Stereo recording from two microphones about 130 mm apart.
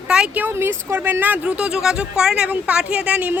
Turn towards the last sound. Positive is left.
turn(degrees=-10)  # may be behind; listen again after turning